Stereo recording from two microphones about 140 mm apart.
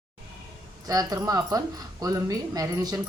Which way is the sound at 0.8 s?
25° right (ahead or behind).